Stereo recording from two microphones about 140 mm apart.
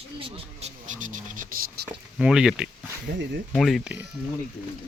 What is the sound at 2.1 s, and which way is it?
Speech, 5° right (ahead or behind).